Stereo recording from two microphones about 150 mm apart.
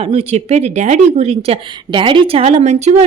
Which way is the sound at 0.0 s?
45° right (ahead or behind).